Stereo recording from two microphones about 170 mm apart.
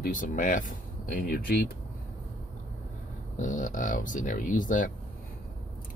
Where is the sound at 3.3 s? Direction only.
50° left (ahead or behind).